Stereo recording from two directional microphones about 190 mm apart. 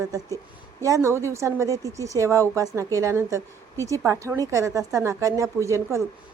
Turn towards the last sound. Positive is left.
turn(degrees=-15)  # may be behind; listen again after turning